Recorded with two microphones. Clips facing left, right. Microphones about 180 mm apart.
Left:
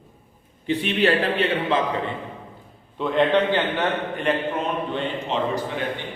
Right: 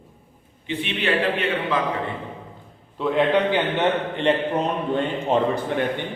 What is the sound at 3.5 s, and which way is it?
A man's voice, 25° right (ahead or behind).